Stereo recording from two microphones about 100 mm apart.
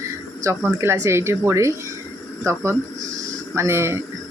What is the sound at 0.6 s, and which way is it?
Speech, 25° right (ahead or behind).